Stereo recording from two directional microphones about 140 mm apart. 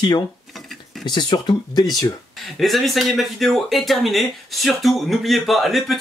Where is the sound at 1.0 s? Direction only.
30° left (ahead or behind).